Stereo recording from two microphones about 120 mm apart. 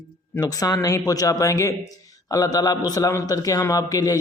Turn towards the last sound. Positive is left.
turn(degrees=30)  # may be behind; listen again after turning